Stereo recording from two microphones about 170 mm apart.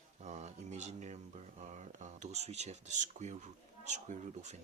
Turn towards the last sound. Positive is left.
turn(degrees=-45)  # may be behind; listen again after turning